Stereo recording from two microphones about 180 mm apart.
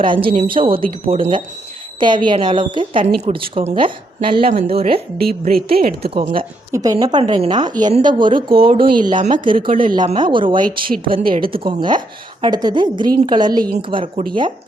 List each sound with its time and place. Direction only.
0.0 s a woman's voice: 30° right (ahead or behind)
5.5 s speech: 55° right (ahead or behind)
6.7 s a woman's voice: 15° right (ahead or behind)
9.6 s a woman's voice: 50° right (ahead or behind)
9.9 s a woman's voice: 25° right (ahead or behind)
10.7 s a woman's voice: 55° right (ahead or behind)
11.3 s a woman's voice: 30° right (ahead or behind)